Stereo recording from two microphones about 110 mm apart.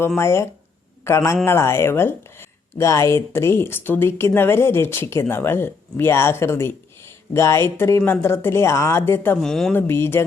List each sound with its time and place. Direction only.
0.2 s speech: 25° left (ahead or behind)
9.4 s speech: 5° left (ahead or behind)
9.7 s speech: 20° left (ahead or behind)